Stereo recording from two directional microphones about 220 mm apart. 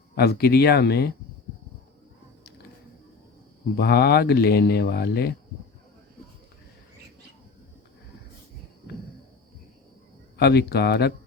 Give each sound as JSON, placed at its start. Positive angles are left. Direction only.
{"t": 0.2, "sound": "speech", "side_deg": 45}
{"t": 3.8, "sound": "speech", "side_deg": 45}
{"t": 10.3, "sound": "speech", "side_deg": 50}